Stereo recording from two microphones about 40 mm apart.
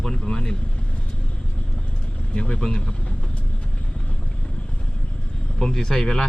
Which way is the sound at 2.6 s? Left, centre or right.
Centre.